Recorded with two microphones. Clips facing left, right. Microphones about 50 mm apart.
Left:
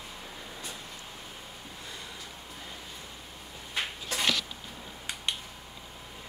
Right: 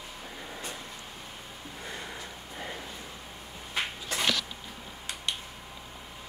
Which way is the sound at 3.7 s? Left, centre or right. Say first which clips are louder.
Right 1 dB; centre.